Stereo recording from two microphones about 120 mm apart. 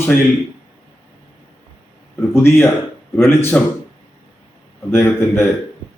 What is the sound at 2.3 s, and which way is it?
A man's voice, 20° left (ahead or behind).